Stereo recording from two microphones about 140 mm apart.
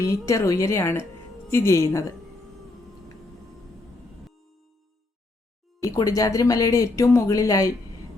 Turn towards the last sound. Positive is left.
turn(degrees=25)  # may be behind; listen again after turning